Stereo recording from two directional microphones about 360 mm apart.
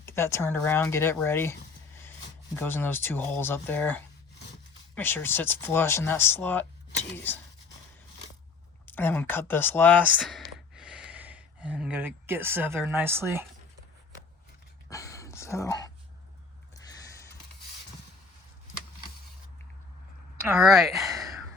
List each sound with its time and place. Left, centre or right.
0.0 s speech: centre
2.6 s speech: centre
8.9 s speech: centre
14.8 s a sound: centre
20.4 s speech: centre